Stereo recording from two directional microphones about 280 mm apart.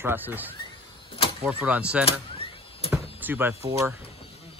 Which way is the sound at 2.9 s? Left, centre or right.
Centre.